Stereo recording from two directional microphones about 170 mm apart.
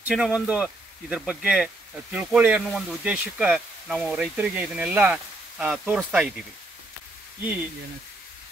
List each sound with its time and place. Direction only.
0.1 s speech: 5° right (ahead or behind)